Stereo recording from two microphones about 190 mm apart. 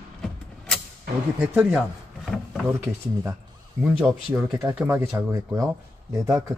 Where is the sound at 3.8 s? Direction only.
10° right (ahead or behind).